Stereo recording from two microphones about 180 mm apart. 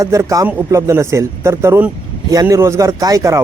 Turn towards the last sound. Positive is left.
turn(degrees=-20)  # may be behind; listen again after turning